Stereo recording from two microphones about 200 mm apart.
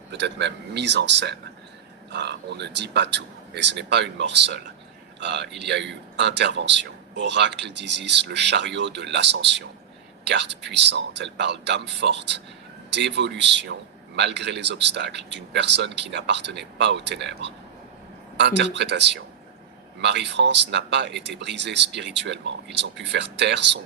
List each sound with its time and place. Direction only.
0.1 s a man's voice: 60° right (ahead or behind)